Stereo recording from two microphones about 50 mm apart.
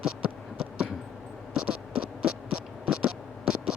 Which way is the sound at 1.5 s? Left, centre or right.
Centre.